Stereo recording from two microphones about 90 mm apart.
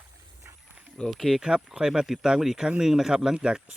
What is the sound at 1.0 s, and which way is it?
Speech, centre (ahead or behind).